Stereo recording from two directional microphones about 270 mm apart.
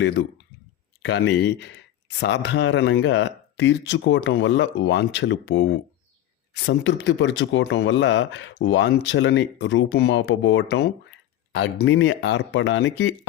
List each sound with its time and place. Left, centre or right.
0.0 s speech: left